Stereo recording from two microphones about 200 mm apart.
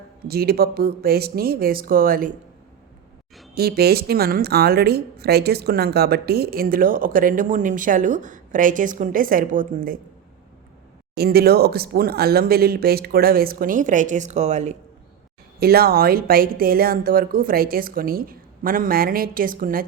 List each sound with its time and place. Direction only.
0.3 s a woman's voice: 50° right (ahead or behind)
3.5 s a woman's voice: 50° right (ahead or behind)
11.1 s a woman's voice: 50° right (ahead or behind); by 14.8 s 35° right (ahead or behind)
15.5 s a woman's voice: 50° right (ahead or behind)